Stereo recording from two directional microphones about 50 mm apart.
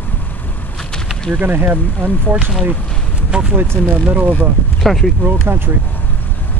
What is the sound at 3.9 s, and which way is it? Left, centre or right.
Speech, right.